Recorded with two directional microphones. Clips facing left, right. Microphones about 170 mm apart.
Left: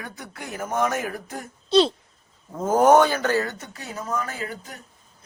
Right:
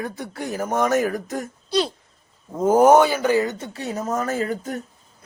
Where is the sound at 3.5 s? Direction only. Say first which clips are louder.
Right 7 dB; 30° right (ahead or behind); by 4.8 s 45° right (ahead or behind).